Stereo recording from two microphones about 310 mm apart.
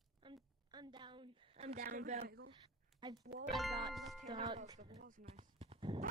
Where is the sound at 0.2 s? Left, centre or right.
Centre.